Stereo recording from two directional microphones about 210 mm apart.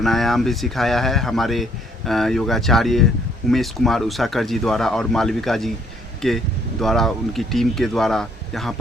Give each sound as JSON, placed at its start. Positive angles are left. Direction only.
{"t": 0.0, "sound": "speech", "side_deg": 0}